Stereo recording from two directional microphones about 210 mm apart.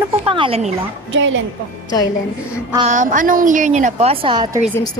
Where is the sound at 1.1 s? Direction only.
65° right (ahead or behind).